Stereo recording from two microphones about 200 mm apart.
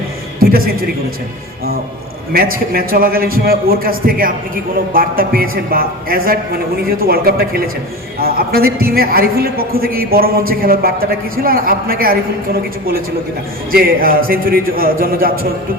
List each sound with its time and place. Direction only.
0.3 s a man's voice: 45° right (ahead or behind)
2.3 s a man's voice: 50° right (ahead or behind)
13.7 s a man's voice: 45° right (ahead or behind)